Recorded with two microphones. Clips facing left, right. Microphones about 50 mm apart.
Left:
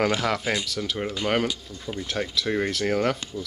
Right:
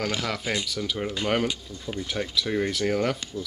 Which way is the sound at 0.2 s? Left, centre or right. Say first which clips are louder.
Left 3 dB; centre.